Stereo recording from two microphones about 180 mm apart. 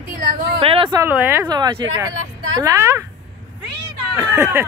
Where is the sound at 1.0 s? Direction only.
10° right (ahead or behind).